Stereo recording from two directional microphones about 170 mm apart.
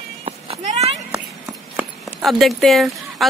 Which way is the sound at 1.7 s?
Centre (ahead or behind).